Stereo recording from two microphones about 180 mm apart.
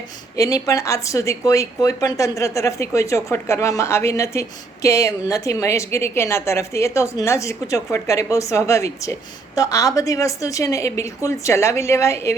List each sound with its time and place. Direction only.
0.3 s speech: 20° left (ahead or behind)